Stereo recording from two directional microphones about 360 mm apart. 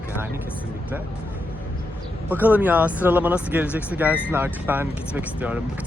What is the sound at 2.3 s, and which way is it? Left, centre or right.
Speech, centre.